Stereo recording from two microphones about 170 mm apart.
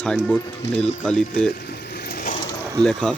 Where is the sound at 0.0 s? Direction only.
5° left (ahead or behind).